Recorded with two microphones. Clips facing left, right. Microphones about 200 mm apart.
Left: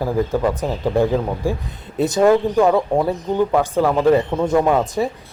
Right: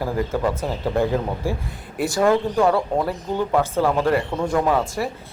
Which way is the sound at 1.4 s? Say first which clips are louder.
Left 3 dB; 15° left (ahead or behind).